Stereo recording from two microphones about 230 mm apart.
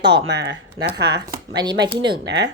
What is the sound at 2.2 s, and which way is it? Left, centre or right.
Speech, right.